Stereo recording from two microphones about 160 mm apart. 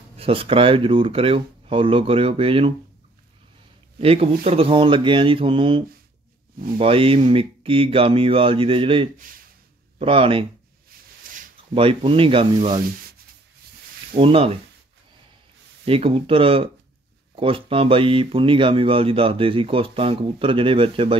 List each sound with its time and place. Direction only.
0.2 s speech: 35° right (ahead or behind)
4.0 s speech: 40° right (ahead or behind)
11.3 s a sound: 60° right (ahead or behind)
11.7 s speech: 35° right (ahead or behind)
14.1 s speech: 35° right (ahead or behind)
15.8 s speech: 35° right (ahead or behind)